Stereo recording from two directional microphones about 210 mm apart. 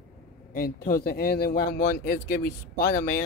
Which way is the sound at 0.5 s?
45° left (ahead or behind).